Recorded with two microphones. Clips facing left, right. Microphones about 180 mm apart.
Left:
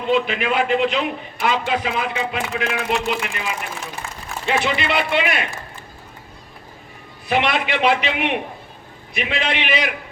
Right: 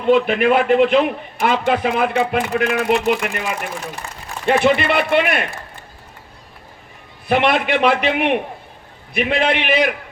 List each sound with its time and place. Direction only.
0.0 s a man's voice: 55° right (ahead or behind)
7.3 s a man's voice: 55° right (ahead or behind)